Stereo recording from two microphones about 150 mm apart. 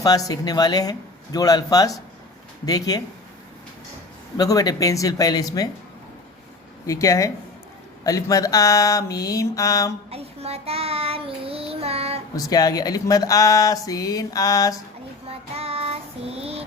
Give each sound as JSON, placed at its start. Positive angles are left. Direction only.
{"t": 0.0, "sound": "speech", "side_deg": 25}
{"t": 4.4, "sound": "speech", "side_deg": 25}
{"t": 6.8, "sound": "speech", "side_deg": 20}
{"t": 10.1, "sound": "child singing", "side_deg": -40}
{"t": 12.4, "sound": "speech", "side_deg": 25}
{"t": 15.3, "sound": "child singing", "side_deg": -40}